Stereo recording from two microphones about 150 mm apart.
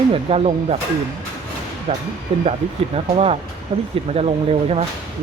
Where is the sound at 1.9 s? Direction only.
40° right (ahead or behind).